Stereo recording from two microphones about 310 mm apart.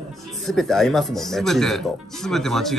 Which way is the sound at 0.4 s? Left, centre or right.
Centre.